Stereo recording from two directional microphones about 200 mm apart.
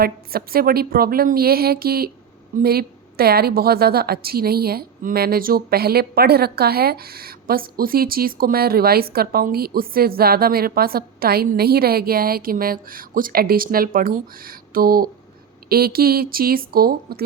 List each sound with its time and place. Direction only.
0.0 s a woman's voice: 50° right (ahead or behind)